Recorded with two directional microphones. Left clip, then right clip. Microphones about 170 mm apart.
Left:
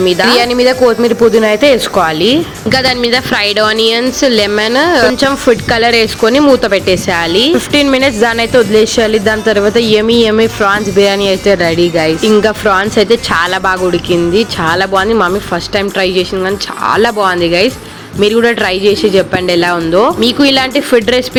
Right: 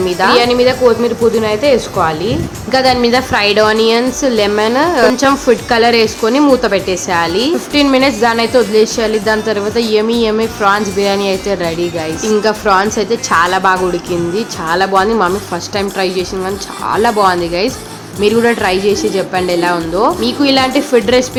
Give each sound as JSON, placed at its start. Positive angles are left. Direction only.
{"t": 0.0, "sound": "a man's voice", "side_deg": 25}
{"t": 0.3, "sound": "a man's voice", "side_deg": 40}
{"t": 2.6, "sound": "a woman's voice", "side_deg": 20}
{"t": 20.2, "sound": "a man's voice", "side_deg": 35}